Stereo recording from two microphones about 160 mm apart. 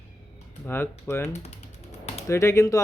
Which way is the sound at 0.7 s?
15° left (ahead or behind).